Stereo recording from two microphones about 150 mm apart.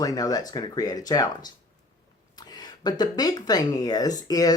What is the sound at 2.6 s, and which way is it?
Speech, 25° left (ahead or behind).